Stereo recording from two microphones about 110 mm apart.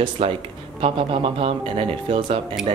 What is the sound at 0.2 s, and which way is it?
Speech, 60° right (ahead or behind).